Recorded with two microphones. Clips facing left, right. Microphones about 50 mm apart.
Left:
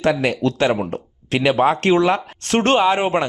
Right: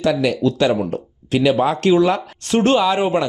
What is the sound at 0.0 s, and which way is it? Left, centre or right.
Speech, left.